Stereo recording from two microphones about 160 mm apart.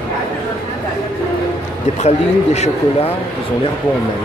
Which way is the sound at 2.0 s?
45° left (ahead or behind).